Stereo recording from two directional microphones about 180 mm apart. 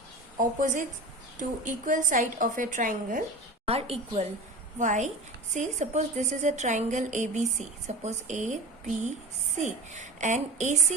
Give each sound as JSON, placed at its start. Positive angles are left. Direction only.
{"t": 0.3, "sound": "a woman's voice", "side_deg": -45}
{"t": 3.7, "sound": "a woman's voice", "side_deg": -35}
{"t": 9.6, "sound": "a woman's voice", "side_deg": -40}